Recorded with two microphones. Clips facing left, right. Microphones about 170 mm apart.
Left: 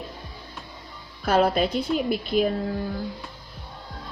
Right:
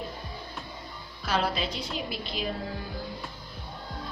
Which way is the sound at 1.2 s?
55° left (ahead or behind).